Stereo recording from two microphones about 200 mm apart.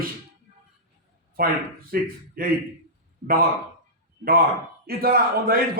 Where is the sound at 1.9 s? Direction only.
45° right (ahead or behind).